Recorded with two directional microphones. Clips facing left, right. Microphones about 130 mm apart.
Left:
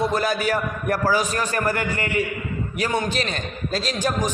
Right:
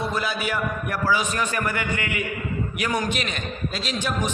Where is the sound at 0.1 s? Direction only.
40° left (ahead or behind).